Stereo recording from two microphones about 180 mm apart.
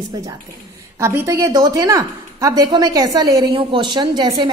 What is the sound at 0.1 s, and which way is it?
A woman's voice, 20° right (ahead or behind).